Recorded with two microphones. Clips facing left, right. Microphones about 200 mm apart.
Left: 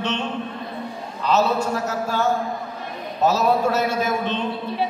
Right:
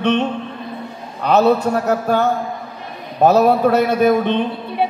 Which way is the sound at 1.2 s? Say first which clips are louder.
Right 6 dB; 60° right (ahead or behind).